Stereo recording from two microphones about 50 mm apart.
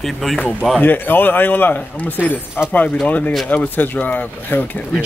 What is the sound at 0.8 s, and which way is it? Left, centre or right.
A man's voice, left.